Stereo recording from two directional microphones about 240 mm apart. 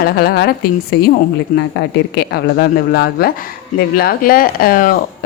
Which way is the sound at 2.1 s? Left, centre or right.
Left.